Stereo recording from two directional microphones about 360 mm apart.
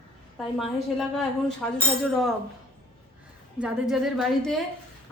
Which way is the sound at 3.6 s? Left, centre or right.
Centre.